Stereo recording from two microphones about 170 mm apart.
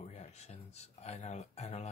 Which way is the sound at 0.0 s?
40° left (ahead or behind).